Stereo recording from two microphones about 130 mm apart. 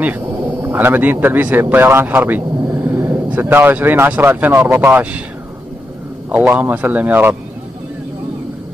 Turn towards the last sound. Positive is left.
turn(degrees=-15)  # may be behind; listen again after turning